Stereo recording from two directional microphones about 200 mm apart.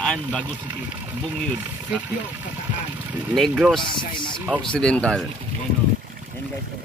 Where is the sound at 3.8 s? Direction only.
25° left (ahead or behind).